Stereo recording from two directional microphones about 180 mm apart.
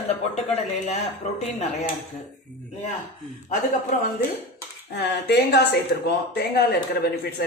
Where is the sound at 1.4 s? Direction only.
40° left (ahead or behind).